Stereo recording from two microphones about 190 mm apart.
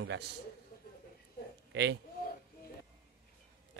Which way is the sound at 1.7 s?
60° right (ahead or behind).